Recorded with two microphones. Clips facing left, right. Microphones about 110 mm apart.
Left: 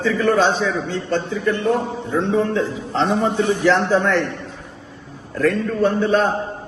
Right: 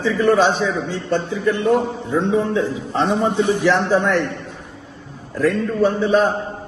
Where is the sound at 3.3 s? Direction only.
15° right (ahead or behind).